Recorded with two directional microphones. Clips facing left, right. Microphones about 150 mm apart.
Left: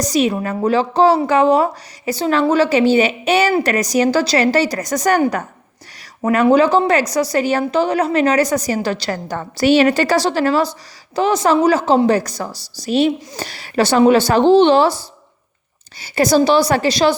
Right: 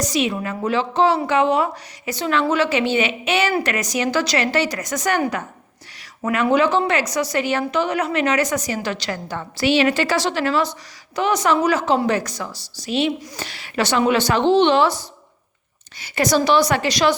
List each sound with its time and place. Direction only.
0.0 s a woman's voice: 40° left (ahead or behind)
6.2 s a woman's voice: 35° left (ahead or behind)